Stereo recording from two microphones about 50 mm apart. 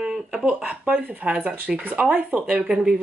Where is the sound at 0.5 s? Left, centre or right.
Right.